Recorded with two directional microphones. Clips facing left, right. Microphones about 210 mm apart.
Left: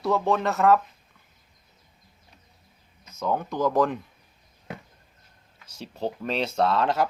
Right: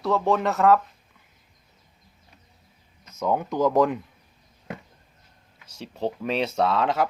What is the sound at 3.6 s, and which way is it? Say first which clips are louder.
Speech: right 3 dB; 20° right (ahead or behind).